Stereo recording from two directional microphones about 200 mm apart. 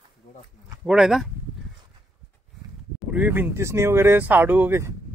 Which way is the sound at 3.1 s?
10° right (ahead or behind).